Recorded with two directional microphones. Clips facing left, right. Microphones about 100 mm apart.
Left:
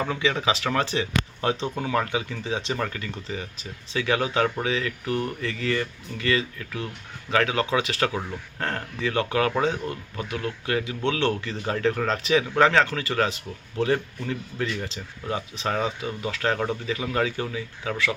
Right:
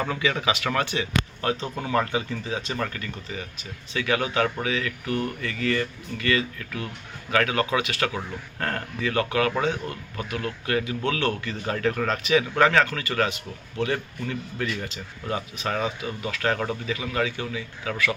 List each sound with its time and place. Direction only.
0.2 s speech: 25° left (ahead or behind)
1.7 s speech: 5° left (ahead or behind)
2.4 s speech: 25° left (ahead or behind)
2.7 s speech: 10° left (ahead or behind)
3.2 s speech: 25° left (ahead or behind)
15.8 s speech: 25° left (ahead or behind)